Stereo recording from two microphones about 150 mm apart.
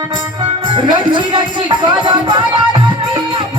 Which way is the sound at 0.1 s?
35° right (ahead or behind).